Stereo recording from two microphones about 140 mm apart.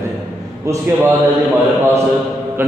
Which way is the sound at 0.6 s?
20° right (ahead or behind).